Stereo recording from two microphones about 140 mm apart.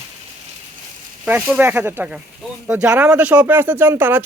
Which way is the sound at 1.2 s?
10° right (ahead or behind).